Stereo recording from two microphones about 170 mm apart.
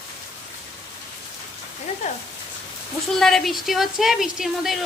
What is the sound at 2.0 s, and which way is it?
Speech, 40° left (ahead or behind).